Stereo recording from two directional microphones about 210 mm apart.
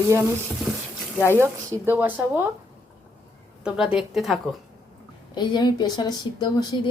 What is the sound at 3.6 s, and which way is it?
Speech, 5° right (ahead or behind).